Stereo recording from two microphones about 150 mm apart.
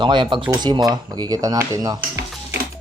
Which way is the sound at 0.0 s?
30° right (ahead or behind).